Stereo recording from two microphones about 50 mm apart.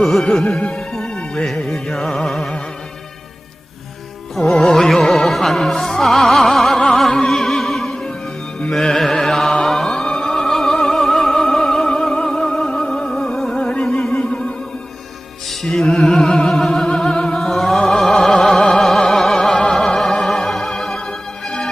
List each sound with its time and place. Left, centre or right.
0.0 s music: centre
1.0 s music: centre
1.6 s music: centre
4.4 s music: centre
15.4 s music: centre